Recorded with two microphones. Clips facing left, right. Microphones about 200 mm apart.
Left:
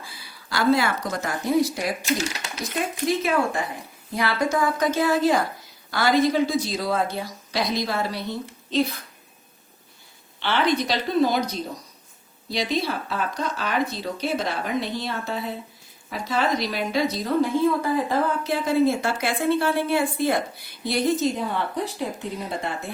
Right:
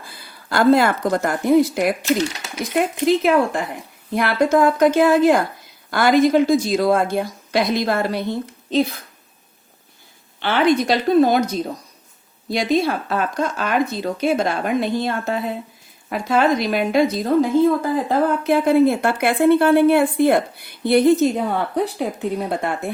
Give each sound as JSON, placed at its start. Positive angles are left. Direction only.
{"t": 0.1, "sound": "a woman's voice", "side_deg": -55}
{"t": 10.4, "sound": "a woman's voice", "side_deg": -50}